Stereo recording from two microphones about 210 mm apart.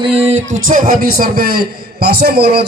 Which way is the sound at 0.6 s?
40° right (ahead or behind).